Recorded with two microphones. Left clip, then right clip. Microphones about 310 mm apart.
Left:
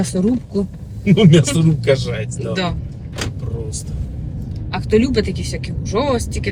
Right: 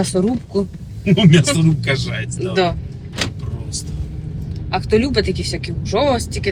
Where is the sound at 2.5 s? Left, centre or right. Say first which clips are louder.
Right 5 dB; centre.